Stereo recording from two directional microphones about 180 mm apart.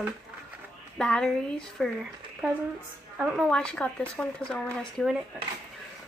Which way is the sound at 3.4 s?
5° left (ahead or behind).